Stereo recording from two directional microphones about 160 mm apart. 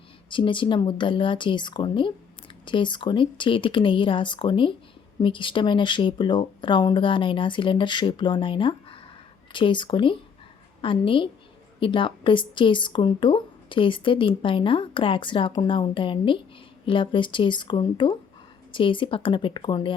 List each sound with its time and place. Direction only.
0.3 s a woman's voice: 30° left (ahead or behind)